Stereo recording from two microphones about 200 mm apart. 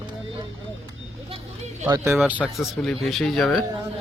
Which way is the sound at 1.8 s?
10° right (ahead or behind).